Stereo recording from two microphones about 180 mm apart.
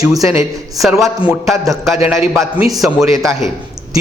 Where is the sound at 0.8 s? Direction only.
Centre (ahead or behind).